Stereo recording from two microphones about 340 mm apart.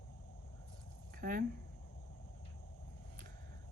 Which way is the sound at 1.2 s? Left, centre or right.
Right.